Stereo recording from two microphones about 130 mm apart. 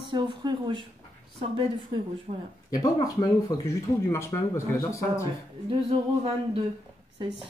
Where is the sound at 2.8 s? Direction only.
30° left (ahead or behind).